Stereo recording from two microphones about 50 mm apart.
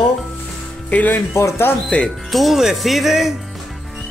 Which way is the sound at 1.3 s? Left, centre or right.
Left.